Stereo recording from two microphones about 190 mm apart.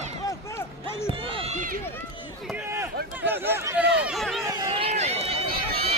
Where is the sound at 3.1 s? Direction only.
10° right (ahead or behind).